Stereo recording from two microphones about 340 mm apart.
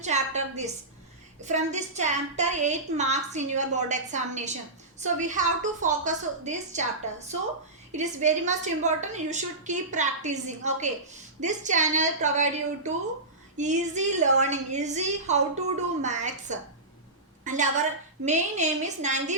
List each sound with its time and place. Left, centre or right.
0.0 s a woman's voice: centre
7.9 s a woman's voice: right